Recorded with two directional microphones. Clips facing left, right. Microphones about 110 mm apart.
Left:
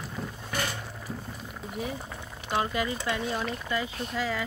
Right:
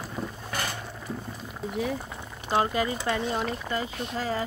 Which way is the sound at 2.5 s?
35° right (ahead or behind).